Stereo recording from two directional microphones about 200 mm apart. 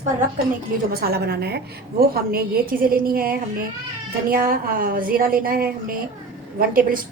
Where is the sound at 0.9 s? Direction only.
50° right (ahead or behind).